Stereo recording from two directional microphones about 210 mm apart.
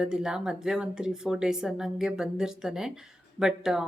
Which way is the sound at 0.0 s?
5° right (ahead or behind).